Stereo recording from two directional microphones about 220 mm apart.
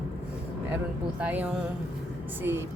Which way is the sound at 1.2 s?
5° right (ahead or behind).